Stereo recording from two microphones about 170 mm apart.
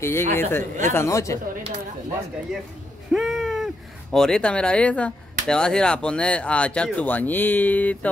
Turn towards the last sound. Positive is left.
turn(degrees=10)  # may be behind; listen again after turning